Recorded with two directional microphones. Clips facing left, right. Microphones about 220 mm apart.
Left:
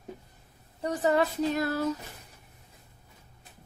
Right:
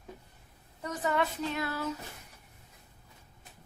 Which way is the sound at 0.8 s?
35° left (ahead or behind).